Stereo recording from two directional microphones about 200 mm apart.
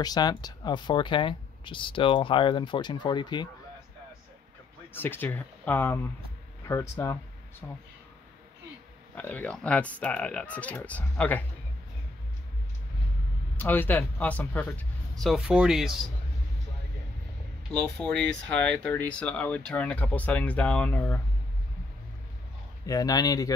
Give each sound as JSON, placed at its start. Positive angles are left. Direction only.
{"t": 0.0, "sound": "speech", "side_deg": 20}
{"t": 4.9, "sound": "speech", "side_deg": 10}
{"t": 9.1, "sound": "speech", "side_deg": 10}
{"t": 13.6, "sound": "speech", "side_deg": 10}
{"t": 17.8, "sound": "speech", "side_deg": 5}
{"t": 22.8, "sound": "speech", "side_deg": 20}